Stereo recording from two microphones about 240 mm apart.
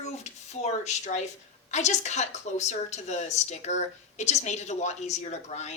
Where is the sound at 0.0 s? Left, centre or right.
Left.